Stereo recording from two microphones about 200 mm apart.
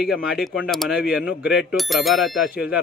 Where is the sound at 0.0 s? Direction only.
Centre (ahead or behind).